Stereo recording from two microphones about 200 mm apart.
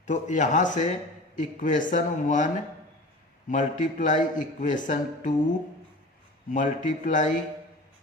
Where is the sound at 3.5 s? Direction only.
40° left (ahead or behind).